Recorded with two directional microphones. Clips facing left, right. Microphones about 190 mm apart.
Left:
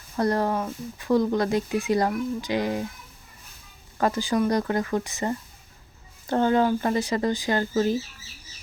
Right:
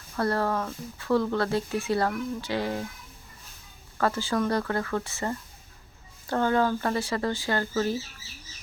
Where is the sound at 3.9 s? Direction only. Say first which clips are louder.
Left 3 dB; 15° left (ahead or behind).